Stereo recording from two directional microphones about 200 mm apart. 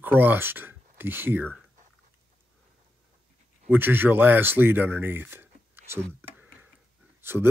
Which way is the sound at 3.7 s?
10° right (ahead or behind).